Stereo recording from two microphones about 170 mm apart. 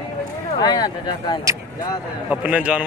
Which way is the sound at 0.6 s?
25° left (ahead or behind).